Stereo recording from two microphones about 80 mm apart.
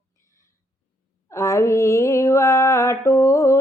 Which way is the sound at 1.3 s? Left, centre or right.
Left.